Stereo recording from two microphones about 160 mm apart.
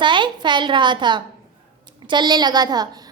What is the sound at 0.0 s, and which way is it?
A woman's voice, 30° right (ahead or behind).